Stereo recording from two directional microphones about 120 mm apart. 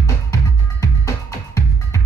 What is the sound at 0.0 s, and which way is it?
Music, 25° left (ahead or behind).